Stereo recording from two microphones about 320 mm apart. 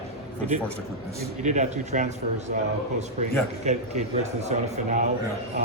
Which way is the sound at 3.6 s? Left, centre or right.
Right.